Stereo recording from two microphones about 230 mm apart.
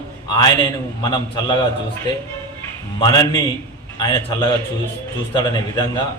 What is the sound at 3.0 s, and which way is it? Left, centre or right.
A man's voice, centre.